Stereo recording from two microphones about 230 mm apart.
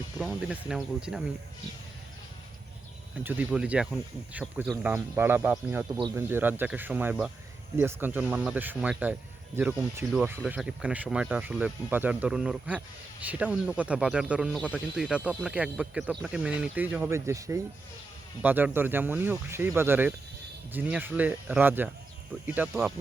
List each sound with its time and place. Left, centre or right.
0.2 s speech: centre
3.2 s speech: centre